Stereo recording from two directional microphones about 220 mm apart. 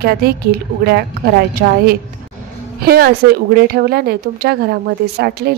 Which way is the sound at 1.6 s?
35° right (ahead or behind).